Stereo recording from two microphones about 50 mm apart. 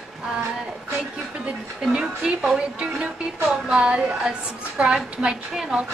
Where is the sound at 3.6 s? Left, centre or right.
Right.